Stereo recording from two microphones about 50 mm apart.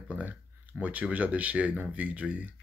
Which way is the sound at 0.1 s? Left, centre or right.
Right.